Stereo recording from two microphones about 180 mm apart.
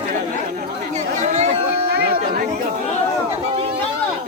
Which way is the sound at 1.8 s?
55° right (ahead or behind).